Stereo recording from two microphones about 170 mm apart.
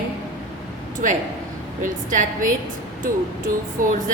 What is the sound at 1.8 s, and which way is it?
Speech, 50° right (ahead or behind).